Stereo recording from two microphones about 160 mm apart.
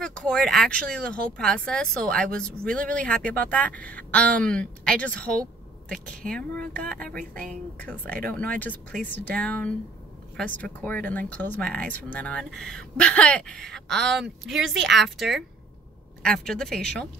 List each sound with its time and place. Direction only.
0.0 s a woman's voice: 5° left (ahead or behind)